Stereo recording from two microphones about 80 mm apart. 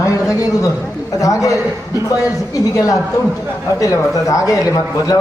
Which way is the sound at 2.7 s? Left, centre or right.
Left.